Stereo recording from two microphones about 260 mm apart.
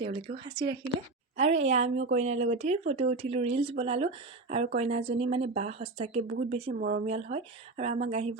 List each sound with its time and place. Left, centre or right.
0.0 s speech: right